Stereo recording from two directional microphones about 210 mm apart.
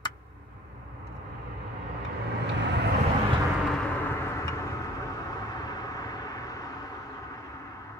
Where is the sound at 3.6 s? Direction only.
10° left (ahead or behind).